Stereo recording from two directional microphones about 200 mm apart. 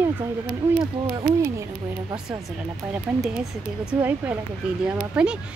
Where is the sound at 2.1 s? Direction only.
5° right (ahead or behind).